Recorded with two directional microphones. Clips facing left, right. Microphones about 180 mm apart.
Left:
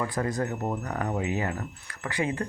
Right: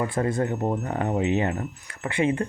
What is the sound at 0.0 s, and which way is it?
Speech, 25° right (ahead or behind).